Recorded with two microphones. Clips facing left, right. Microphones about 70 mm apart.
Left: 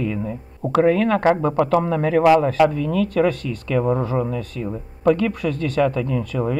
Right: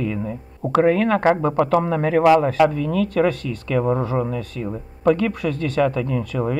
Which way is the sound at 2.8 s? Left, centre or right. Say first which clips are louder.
Even; right.